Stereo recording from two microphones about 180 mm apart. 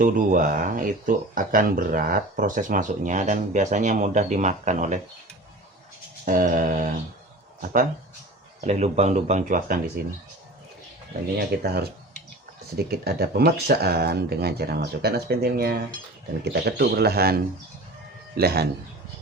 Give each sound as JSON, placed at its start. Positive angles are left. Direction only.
{"t": 0.0, "sound": "speech", "side_deg": -50}
{"t": 6.2, "sound": "speech", "side_deg": -50}
{"t": 11.3, "sound": "speech", "side_deg": -60}